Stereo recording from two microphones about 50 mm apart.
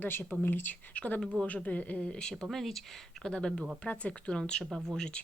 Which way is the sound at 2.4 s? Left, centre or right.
Centre.